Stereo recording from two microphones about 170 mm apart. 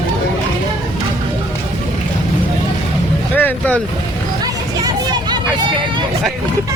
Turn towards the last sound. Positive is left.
turn(degrees=-25)  # may be behind; listen again after turning